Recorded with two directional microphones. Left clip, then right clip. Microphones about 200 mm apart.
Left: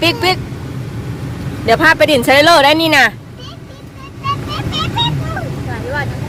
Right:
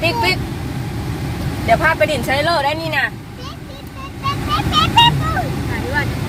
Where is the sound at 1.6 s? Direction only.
40° left (ahead or behind).